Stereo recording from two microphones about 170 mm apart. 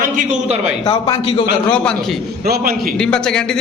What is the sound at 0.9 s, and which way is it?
Speech, 30° left (ahead or behind).